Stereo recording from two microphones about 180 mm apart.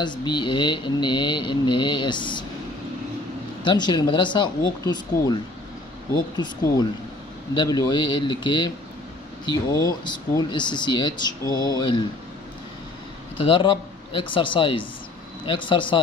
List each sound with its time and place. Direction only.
0.0 s speech: 25° left (ahead or behind)
3.6 s speech: 25° left (ahead or behind)
7.5 s speech: 25° left (ahead or behind)
13.4 s speech: 30° left (ahead or behind)